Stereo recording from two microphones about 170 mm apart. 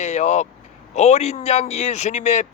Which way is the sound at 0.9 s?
40° left (ahead or behind).